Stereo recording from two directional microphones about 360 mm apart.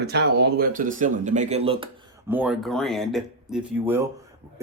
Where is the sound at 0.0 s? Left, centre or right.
Right.